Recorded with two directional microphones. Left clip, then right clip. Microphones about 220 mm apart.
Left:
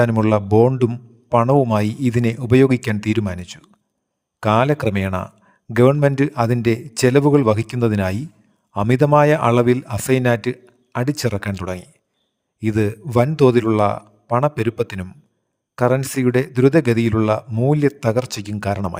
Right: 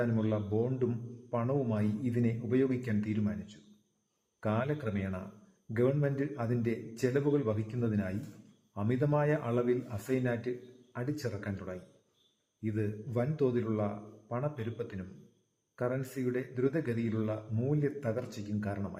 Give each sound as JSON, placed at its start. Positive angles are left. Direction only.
{"t": 0.0, "sound": "speech", "side_deg": 50}